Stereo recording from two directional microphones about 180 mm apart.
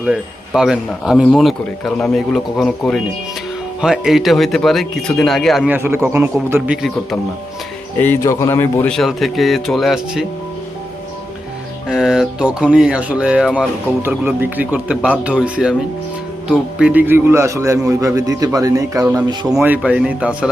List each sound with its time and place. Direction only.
0.0 s speech: 5° right (ahead or behind)
5.7 s a man's voice: 10° right (ahead or behind)
7.9 s speech: 10° left (ahead or behind)
11.9 s a man's voice: 5° right (ahead or behind); by 19.5 s 20° right (ahead or behind)
19.5 s a man's voice: 5° right (ahead or behind)